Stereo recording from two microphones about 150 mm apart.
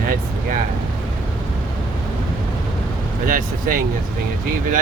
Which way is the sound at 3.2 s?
65° right (ahead or behind).